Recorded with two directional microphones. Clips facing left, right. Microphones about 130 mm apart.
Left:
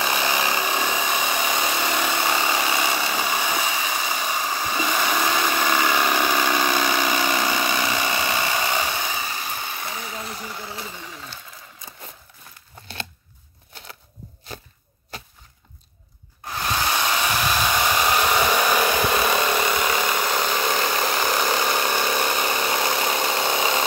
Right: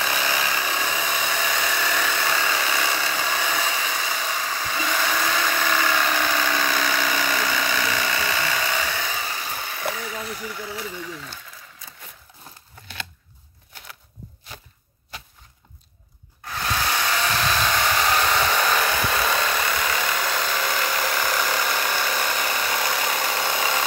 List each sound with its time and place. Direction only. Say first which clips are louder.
0.0 s power tool: left 2 dB; 20° left (ahead or behind)
9.9 s a sound: right 1 dB; 25° left (ahead or behind)
16.9 s hair dryer: left 1 dB; 20° left (ahead or behind)